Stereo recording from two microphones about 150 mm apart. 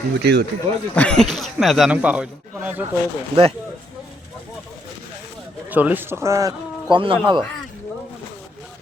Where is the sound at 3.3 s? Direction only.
40° right (ahead or behind).